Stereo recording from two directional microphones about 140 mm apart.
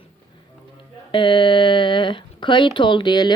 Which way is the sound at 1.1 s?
35° left (ahead or behind).